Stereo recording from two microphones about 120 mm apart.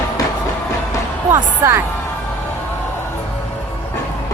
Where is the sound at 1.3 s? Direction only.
25° right (ahead or behind).